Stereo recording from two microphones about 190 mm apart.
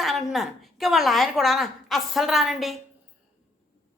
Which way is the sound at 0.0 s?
Centre (ahead or behind).